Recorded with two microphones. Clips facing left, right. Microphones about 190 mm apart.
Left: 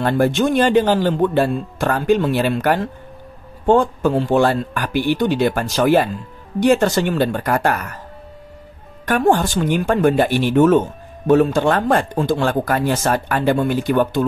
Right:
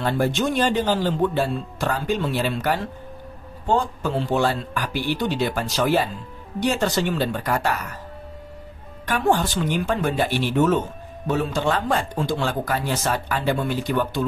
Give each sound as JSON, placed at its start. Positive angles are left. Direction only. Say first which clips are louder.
{"t": 0.0, "sound": "speech", "louder": "left 5 dB", "side_deg": 55}
{"t": 9.0, "sound": "speech", "louder": "left 5 dB", "side_deg": 50}